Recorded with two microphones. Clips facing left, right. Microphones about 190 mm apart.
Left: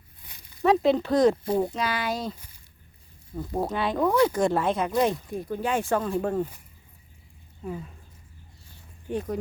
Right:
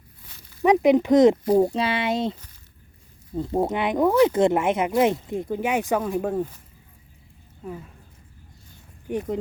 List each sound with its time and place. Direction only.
0.6 s speech: 15° right (ahead or behind)
1.5 s speech: 40° right (ahead or behind)
1.8 s speech: 25° right (ahead or behind); by 6.4 s 10° right (ahead or behind)
9.0 s speech: 20° right (ahead or behind)